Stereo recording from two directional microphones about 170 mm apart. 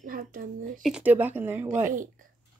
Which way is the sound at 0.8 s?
5° right (ahead or behind).